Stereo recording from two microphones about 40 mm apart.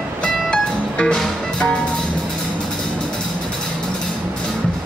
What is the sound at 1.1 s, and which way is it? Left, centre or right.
Music, centre.